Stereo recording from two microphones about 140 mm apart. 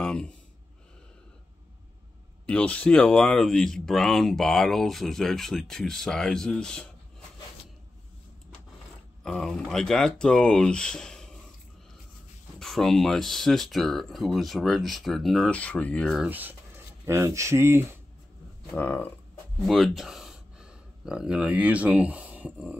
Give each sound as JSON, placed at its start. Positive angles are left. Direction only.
{"t": 0.0, "sound": "a sound", "side_deg": 5}
{"t": 2.4, "sound": "speech", "side_deg": 10}
{"t": 9.2, "sound": "speech", "side_deg": 5}
{"t": 12.5, "sound": "speech", "side_deg": 0}
{"t": 16.2, "sound": "speech", "side_deg": -10}
{"t": 18.8, "sound": "a sound", "side_deg": 10}
{"t": 19.6, "sound": "speech", "side_deg": 0}